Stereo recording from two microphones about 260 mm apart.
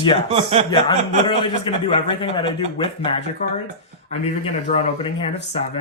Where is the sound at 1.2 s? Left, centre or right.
Centre.